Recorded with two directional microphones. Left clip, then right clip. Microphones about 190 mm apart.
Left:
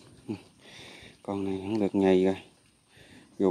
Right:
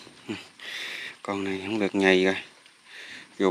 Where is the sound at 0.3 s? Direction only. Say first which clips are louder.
Right 6 dB; 10° left (ahead or behind).